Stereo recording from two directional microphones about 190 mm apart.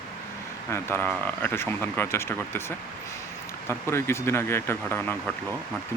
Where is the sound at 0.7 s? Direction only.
10° left (ahead or behind).